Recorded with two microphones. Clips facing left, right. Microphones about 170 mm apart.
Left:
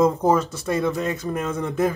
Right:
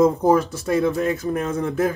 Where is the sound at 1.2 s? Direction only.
Centre (ahead or behind).